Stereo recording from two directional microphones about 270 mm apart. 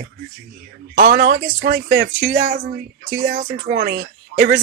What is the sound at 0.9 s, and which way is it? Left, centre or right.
Speech, right.